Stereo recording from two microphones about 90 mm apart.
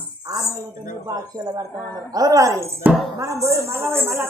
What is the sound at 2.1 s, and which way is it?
A woman's voice, 40° right (ahead or behind).